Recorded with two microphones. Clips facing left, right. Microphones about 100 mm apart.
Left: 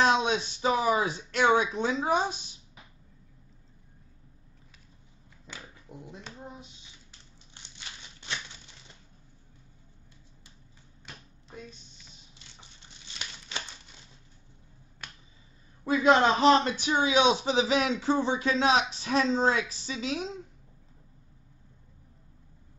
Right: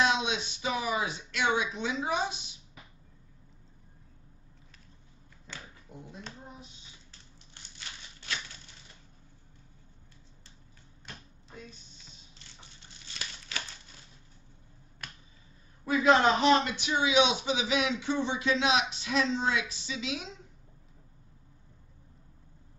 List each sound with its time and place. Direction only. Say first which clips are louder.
0.0 s a man's voice: left 4 dB; 40° left (ahead or behind)
5.5 s a sound: left 1 dB; 20° left (ahead or behind)
13.0 s crumpling: even; 20° left (ahead or behind)
15.8 s a man's voice: left 1 dB; 30° left (ahead or behind)